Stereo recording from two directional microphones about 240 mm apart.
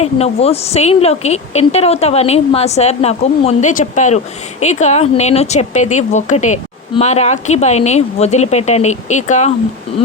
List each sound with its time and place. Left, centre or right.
0.0 s speech: left